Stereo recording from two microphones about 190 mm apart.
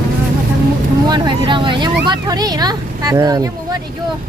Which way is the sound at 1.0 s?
25° right (ahead or behind).